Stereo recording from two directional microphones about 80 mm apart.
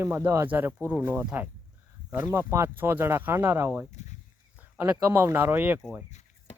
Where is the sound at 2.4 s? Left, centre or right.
Right.